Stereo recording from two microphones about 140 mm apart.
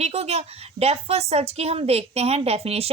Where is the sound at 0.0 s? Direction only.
50° right (ahead or behind).